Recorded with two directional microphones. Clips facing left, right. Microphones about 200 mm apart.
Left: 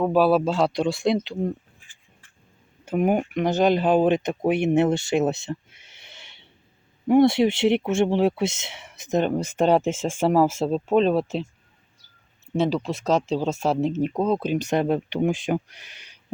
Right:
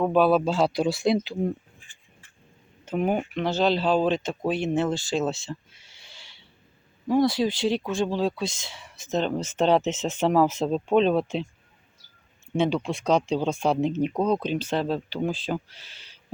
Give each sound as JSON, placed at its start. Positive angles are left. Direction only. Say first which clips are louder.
{"t": 0.0, "sound": "speech", "louder": "left 1 dB", "side_deg": 5}
{"t": 2.8, "sound": "speech", "louder": "left 3 dB", "side_deg": 10}
{"t": 4.4, "sound": "speech", "louder": "left 5 dB", "side_deg": 65}
{"t": 5.1, "sound": "speech", "louder": "left 4 dB", "side_deg": 15}
{"t": 5.5, "sound": "a sound", "louder": "left 5 dB", "side_deg": 20}
{"t": 7.1, "sound": "speech", "louder": "left 5 dB", "side_deg": 25}
{"t": 12.5, "sound": "speech", "louder": "left 1 dB", "side_deg": 0}